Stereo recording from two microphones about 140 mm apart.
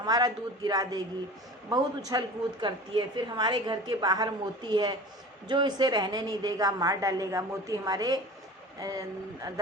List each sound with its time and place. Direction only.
0.0 s a woman's voice: 30° right (ahead or behind)